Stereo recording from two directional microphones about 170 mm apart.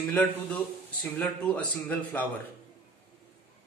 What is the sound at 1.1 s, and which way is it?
A man's voice, 10° left (ahead or behind).